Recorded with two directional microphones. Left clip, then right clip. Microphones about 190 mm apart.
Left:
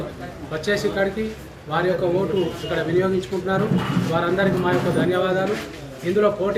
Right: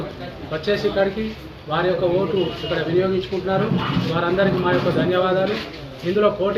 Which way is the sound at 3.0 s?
20° left (ahead or behind).